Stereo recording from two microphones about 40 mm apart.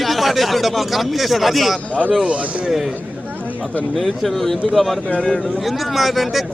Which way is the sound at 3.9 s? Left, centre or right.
Centre.